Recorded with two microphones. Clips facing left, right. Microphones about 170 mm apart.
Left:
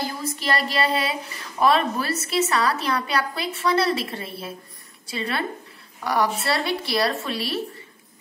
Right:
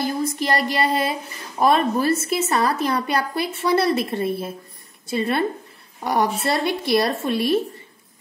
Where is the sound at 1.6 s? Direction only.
45° right (ahead or behind).